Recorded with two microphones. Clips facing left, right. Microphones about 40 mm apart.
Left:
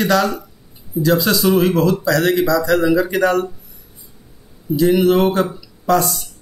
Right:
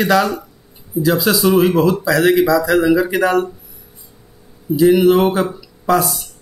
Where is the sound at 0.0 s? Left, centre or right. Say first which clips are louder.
Right 1 dB; centre.